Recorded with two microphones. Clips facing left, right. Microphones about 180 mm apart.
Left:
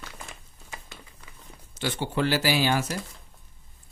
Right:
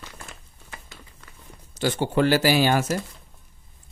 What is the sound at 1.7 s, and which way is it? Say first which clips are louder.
Speech: right 6 dB; 45° right (ahead or behind).